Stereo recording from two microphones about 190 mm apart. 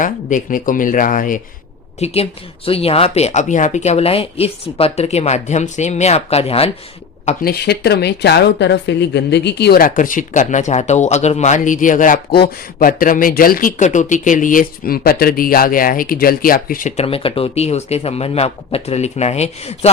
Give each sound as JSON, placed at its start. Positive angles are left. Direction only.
{"t": 0.0, "sound": "speech", "side_deg": 45}
{"t": 7.4, "sound": "speech", "side_deg": 55}
{"t": 17.0, "sound": "speech", "side_deg": 30}